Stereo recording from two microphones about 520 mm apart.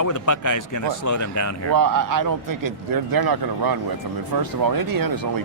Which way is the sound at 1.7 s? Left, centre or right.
Right.